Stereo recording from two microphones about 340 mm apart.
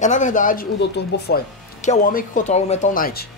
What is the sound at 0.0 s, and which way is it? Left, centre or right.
Speech, left.